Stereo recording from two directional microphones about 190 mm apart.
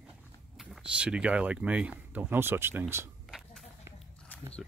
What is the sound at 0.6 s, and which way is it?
Speech, 5° right (ahead or behind).